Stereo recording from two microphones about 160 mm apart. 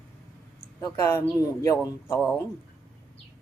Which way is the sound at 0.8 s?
20° left (ahead or behind).